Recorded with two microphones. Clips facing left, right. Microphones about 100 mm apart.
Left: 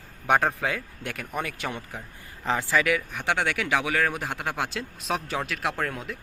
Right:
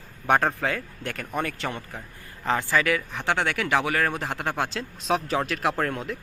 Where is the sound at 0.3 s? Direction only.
5° left (ahead or behind).